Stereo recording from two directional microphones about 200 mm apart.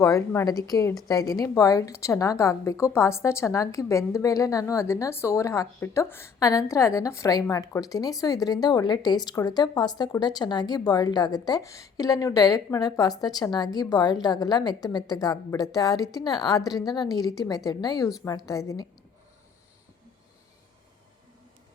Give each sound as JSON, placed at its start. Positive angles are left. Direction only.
{"t": 0.0, "sound": "a woman's voice", "side_deg": 15}